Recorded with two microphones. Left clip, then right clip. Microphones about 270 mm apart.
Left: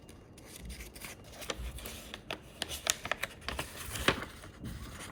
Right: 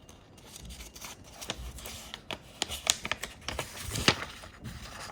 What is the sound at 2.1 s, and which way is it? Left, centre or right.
Typing, centre.